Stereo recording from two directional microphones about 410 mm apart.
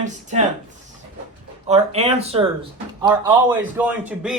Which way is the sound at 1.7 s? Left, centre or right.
Centre.